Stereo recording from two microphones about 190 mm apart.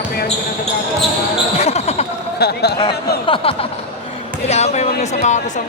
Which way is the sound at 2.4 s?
60° left (ahead or behind).